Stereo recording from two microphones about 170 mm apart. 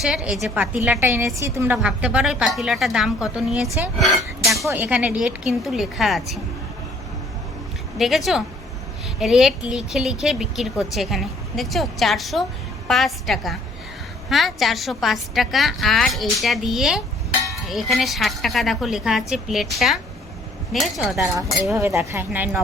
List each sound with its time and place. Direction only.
0.0 s speech: 5° right (ahead or behind)
7.9 s speech: centre (ahead or behind)
21.3 s speech: 15° right (ahead or behind)